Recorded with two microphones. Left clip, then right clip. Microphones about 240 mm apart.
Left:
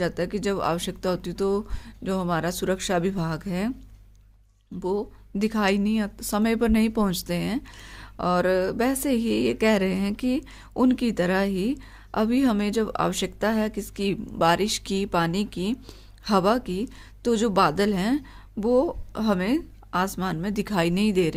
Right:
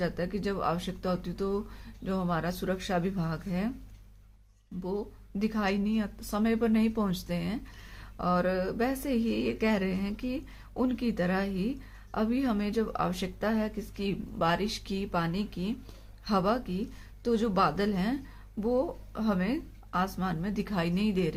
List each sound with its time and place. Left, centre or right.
0.0 s a woman's voice: left
4.8 s a woman's voice: left